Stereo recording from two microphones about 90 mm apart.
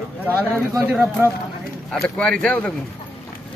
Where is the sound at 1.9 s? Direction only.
10° left (ahead or behind).